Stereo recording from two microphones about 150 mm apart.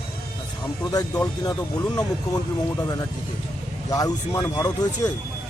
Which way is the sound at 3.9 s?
25° left (ahead or behind).